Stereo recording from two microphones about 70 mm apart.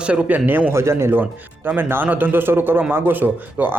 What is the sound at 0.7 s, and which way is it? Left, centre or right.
A man's voice, right.